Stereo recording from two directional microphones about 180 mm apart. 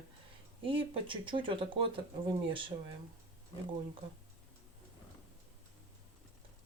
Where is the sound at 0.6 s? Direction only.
30° right (ahead or behind).